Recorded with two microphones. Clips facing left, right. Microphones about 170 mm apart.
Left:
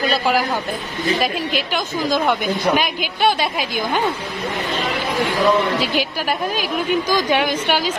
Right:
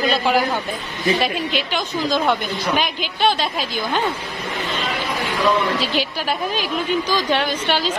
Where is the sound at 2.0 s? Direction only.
10° left (ahead or behind).